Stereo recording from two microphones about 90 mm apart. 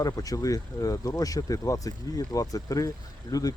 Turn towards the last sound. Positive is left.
turn(degrees=40)  # may be behind; listen again after turning